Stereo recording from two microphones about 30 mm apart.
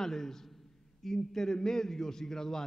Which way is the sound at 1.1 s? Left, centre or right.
Centre.